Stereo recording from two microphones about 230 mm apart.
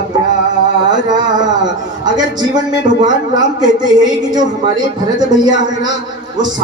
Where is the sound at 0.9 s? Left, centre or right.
Centre.